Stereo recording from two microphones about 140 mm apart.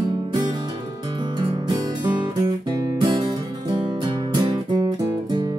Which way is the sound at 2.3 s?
30° right (ahead or behind).